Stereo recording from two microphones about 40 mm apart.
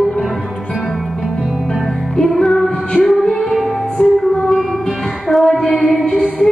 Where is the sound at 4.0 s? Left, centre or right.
Left.